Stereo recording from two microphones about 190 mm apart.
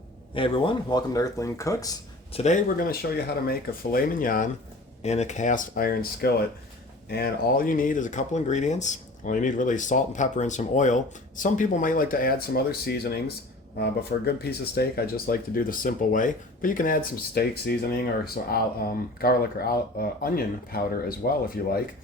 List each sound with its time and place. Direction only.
0.3 s speech: 25° left (ahead or behind)
2.3 s speech: 35° left (ahead or behind)
2.7 s speech: 50° left (ahead or behind)
5.0 s speech: 35° left (ahead or behind); by 21.8 s 50° left (ahead or behind)